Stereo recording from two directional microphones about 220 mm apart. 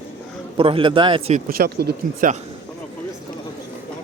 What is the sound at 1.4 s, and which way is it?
Speech, 40° right (ahead or behind).